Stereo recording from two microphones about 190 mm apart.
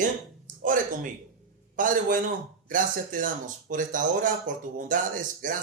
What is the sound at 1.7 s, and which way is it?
Speech, 45° right (ahead or behind).